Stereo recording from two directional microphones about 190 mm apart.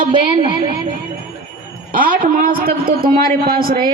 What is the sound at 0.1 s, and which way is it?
Speech, 25° right (ahead or behind).